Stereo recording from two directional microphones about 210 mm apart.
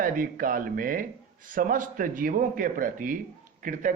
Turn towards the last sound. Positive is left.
turn(degrees=-35)  # may be behind; listen again after turning